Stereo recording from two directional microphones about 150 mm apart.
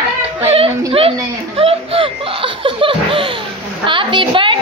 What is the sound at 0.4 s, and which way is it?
Speech, 40° right (ahead or behind).